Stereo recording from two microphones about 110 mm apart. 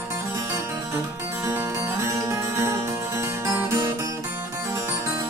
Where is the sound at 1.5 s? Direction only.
25° right (ahead or behind).